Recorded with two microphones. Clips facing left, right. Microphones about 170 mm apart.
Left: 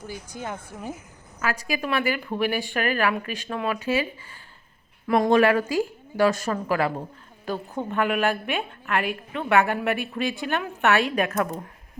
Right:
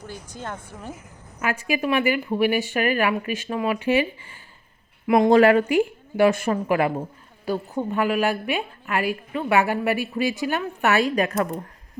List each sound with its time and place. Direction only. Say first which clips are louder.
0.1 s speech: left 1 dB; 10° left (ahead or behind)
1.4 s a woman's voice: right 3 dB; 15° right (ahead or behind)
5.0 s speech: right 4 dB; 15° right (ahead or behind)
5.3 s a woman's voice: right 4 dB; 30° right (ahead or behind)
5.7 s a woman's voice: right 4 dB; 15° right (ahead or behind)